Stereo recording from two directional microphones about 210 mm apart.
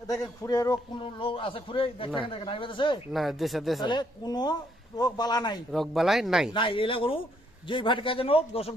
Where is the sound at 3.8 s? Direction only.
20° left (ahead or behind).